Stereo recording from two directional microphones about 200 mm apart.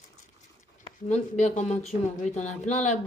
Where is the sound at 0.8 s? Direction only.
35° left (ahead or behind).